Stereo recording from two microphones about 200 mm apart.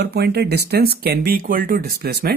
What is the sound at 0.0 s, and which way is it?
Speech, 55° right (ahead or behind).